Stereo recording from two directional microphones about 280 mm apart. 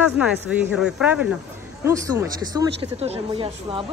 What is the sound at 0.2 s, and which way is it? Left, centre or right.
Speech, centre.